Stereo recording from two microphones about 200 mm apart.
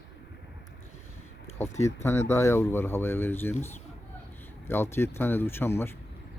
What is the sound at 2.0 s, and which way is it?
Speech, 10° left (ahead or behind).